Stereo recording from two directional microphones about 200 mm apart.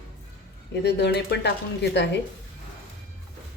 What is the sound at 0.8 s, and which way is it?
Speech, 55° left (ahead or behind).